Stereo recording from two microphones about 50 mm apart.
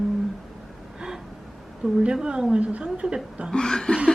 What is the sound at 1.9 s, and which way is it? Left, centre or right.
A woman's voice, centre.